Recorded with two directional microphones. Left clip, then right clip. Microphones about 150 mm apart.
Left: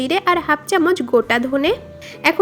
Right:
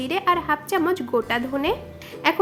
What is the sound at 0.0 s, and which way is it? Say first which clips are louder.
A woman's voice: left 4 dB; 35° left (ahead or behind).